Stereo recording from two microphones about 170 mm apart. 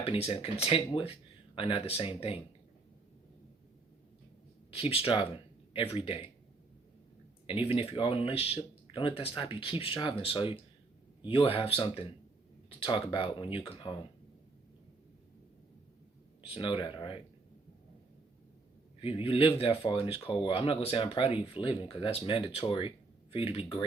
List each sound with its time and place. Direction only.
0.0 s speech: 35° left (ahead or behind)
4.7 s speech: 35° left (ahead or behind)
7.4 s speech: 30° left (ahead or behind)
16.4 s speech: 30° left (ahead or behind)
18.9 s speech: 30° left (ahead or behind)